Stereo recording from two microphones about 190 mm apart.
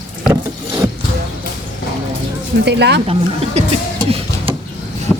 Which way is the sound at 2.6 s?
60° right (ahead or behind).